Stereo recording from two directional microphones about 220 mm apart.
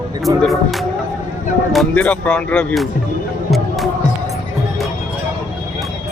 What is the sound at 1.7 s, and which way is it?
Speech, 5° left (ahead or behind).